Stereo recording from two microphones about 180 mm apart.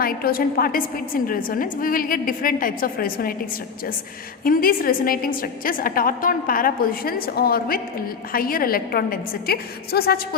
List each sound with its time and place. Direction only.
0.0 s a woman's voice: 55° left (ahead or behind)
4.4 s a woman's voice: 55° left (ahead or behind)